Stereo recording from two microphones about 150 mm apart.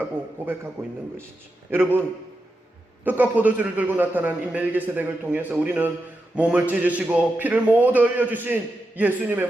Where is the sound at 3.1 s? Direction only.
10° right (ahead or behind).